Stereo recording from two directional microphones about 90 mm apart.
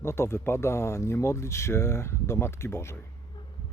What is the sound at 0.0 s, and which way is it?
Speech, 30° left (ahead or behind).